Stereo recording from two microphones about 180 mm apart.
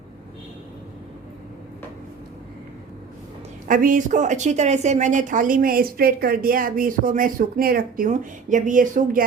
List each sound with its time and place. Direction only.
3.7 s a woman's voice: 50° right (ahead or behind)